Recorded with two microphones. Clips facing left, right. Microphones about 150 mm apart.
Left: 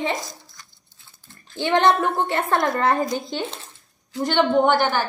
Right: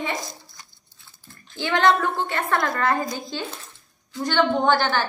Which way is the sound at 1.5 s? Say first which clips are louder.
Left 2 dB; 25° left (ahead or behind).